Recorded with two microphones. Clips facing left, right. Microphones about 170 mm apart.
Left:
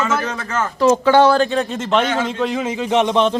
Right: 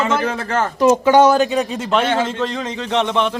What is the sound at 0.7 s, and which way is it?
Speech, 20° right (ahead or behind).